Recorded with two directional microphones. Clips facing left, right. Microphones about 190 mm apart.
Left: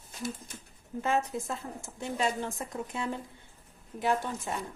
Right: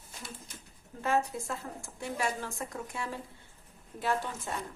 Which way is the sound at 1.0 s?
20° left (ahead or behind).